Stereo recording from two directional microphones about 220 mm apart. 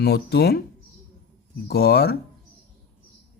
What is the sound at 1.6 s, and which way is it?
Speech, 45° left (ahead or behind).